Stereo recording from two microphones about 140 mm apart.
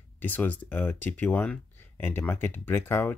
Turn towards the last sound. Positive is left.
turn(degrees=15)  # may be behind; listen again after turning